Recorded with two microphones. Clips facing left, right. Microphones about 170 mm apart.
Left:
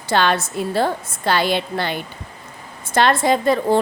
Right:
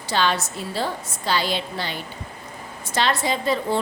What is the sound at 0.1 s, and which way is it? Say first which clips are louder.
A woman's voice: left 4 dB; 55° left (ahead or behind).